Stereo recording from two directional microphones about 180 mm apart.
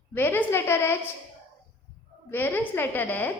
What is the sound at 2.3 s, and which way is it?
A woman's voice, 10° left (ahead or behind).